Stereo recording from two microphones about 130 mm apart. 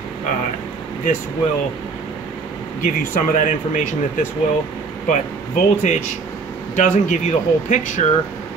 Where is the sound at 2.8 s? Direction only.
80° left.